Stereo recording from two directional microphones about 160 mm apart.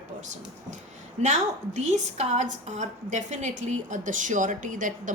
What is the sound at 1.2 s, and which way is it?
A woman's voice, 45° right (ahead or behind).